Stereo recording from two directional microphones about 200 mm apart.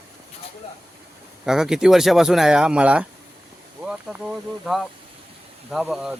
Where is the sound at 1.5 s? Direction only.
5° right (ahead or behind).